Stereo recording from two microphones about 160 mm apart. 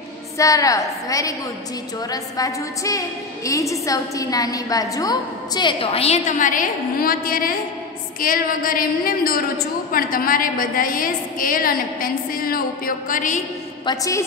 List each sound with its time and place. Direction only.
0.4 s a woman's voice: 20° left (ahead or behind); by 13.4 s 55° left (ahead or behind)
13.8 s a woman's voice: 20° left (ahead or behind)